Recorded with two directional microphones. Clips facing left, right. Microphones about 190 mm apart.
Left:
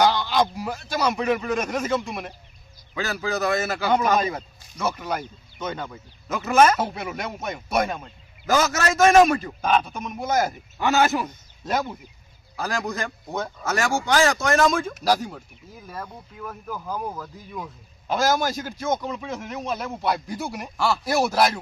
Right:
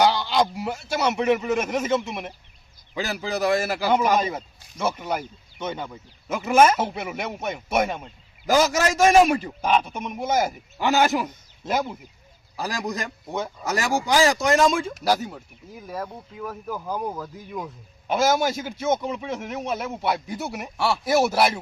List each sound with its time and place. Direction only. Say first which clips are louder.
0.0 s a man's voice: even; 10° right (ahead or behind)
15.1 s a man's voice: left 1 dB; 5° right (ahead or behind)